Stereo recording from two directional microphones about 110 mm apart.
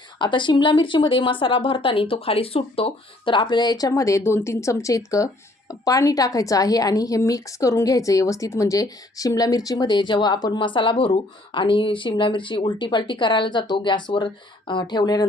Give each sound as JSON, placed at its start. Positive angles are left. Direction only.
{"t": 0.2, "sound": "speech", "side_deg": 45}